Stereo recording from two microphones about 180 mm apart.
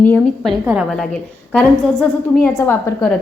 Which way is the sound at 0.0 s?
10° left (ahead or behind).